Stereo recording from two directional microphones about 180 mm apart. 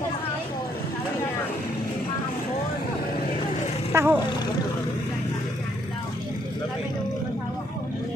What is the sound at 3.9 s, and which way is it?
Speech, 15° right (ahead or behind).